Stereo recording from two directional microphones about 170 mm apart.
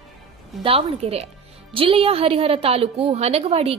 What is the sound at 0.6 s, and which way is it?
A woman's voice, 35° right (ahead or behind).